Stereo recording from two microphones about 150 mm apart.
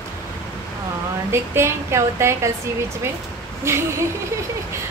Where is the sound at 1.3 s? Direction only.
15° right (ahead or behind).